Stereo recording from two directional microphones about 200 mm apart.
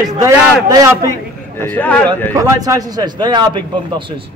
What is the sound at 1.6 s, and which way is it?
Speech, 10° left (ahead or behind).